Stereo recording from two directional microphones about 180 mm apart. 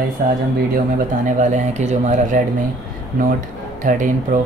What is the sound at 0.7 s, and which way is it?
Speech, 45° right (ahead or behind).